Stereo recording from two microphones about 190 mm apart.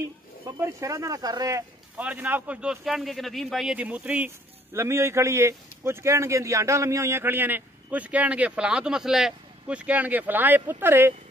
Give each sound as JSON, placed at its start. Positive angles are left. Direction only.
{"t": 0.5, "sound": "speech", "side_deg": -15}
{"t": 2.0, "sound": "speech", "side_deg": -10}